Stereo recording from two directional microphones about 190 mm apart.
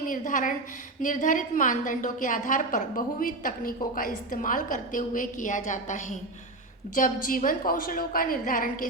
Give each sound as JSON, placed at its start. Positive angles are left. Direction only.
{"t": 0.0, "sound": "a woman's voice", "side_deg": 45}